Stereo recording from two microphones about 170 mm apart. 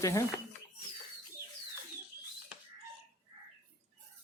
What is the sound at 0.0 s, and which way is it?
Speech, 20° left (ahead or behind).